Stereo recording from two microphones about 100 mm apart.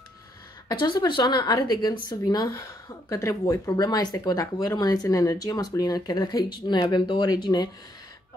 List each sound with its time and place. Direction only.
0.7 s a woman's voice: 50° left (ahead or behind)